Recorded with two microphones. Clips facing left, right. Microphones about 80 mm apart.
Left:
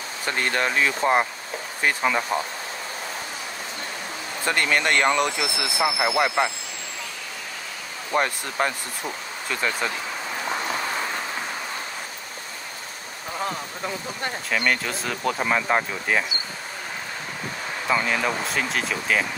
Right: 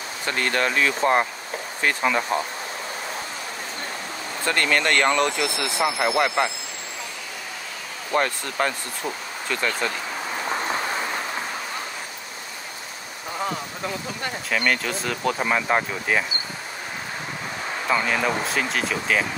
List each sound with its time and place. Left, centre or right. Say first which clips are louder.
0.3 s speech: right 1 dB; centre
4.5 s speech: even; centre
8.1 s speech: right 1 dB; centre
13.4 s speech: right 1 dB; centre
17.8 s speech: right 1 dB; centre